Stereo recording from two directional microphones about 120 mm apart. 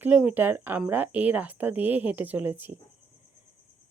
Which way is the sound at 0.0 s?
15° right (ahead or behind).